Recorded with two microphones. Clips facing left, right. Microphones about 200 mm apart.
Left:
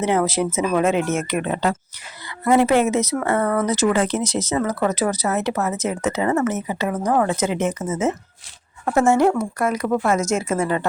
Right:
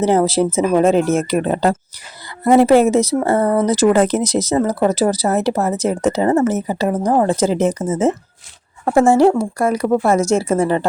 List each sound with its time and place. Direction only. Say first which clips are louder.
0.0 s speech: right 5 dB; 30° right (ahead or behind)